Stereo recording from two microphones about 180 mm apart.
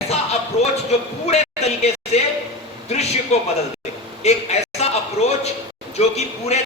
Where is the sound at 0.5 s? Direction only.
40° left (ahead or behind).